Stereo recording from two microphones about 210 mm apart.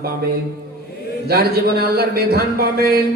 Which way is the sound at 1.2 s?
45° right (ahead or behind).